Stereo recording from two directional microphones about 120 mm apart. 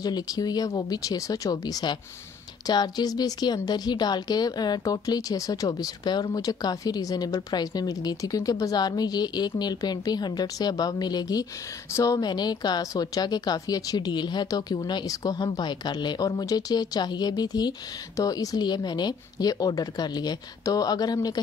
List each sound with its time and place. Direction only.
0.0 s speech: 35° left (ahead or behind)